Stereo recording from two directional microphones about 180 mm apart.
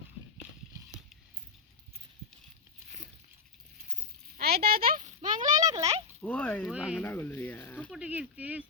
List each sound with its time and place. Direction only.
4.4 s a sound: 55° right (ahead or behind)
5.5 s speech: 20° right (ahead or behind)
6.2 s speech: 10° left (ahead or behind)
6.7 s speech: 5° right (ahead or behind)
7.0 s speech: 10° left (ahead or behind)
7.9 s speech: 5° right (ahead or behind)